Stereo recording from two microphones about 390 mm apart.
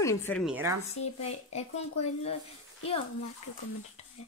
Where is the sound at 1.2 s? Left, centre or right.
Centre.